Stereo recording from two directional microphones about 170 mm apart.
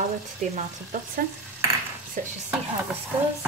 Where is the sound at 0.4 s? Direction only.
45° right (ahead or behind).